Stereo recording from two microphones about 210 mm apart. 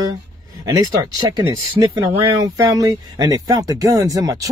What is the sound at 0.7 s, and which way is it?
Speech, 20° right (ahead or behind).